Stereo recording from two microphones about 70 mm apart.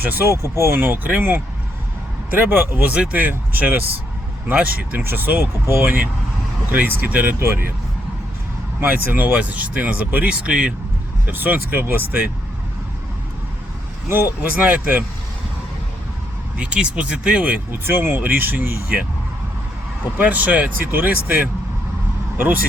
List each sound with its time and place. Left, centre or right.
0.0 s speech: right
5.8 s speech: right
7.3 s speech: right
8.9 s speech: right
11.3 s speech: right
14.5 s speech: centre
16.6 s speech: centre
17.7 s speech: right
20.1 s speech: right